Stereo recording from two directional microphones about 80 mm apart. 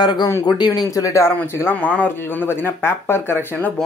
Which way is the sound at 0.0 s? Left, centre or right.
Left.